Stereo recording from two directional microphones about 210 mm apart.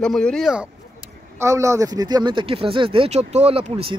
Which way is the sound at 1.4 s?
15° right (ahead or behind).